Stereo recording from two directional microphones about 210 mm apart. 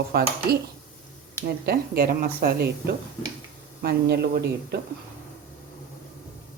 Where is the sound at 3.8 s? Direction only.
50° right (ahead or behind).